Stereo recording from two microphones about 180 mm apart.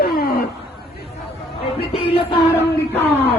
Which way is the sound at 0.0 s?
55° left (ahead or behind).